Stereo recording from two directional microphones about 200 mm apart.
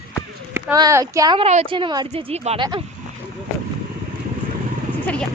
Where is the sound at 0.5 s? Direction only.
15° right (ahead or behind); by 2.6 s 30° right (ahead or behind).